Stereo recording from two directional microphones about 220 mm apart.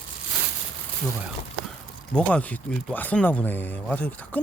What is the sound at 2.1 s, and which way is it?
Speech, 5° left (ahead or behind).